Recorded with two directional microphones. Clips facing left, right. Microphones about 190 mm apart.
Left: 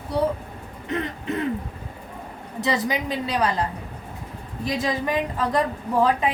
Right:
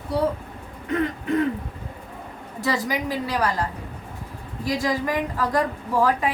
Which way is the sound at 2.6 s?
20° left (ahead or behind).